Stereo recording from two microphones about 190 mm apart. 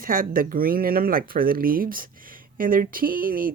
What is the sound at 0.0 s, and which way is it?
Speech, 45° right (ahead or behind).